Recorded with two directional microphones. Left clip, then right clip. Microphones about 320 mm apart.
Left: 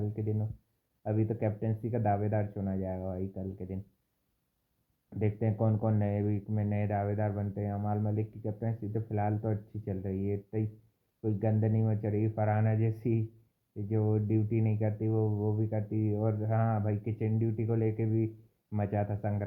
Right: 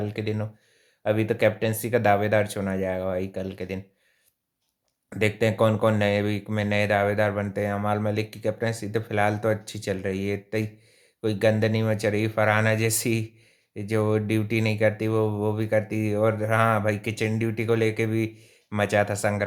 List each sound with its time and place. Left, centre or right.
0.2 s speech: centre
5.0 s speech: centre